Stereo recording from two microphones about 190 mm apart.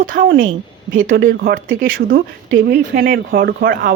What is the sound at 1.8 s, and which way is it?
Speech, 50° right (ahead or behind).